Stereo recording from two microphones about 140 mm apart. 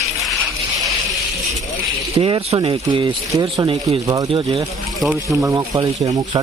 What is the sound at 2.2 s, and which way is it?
Speech, 35° right (ahead or behind).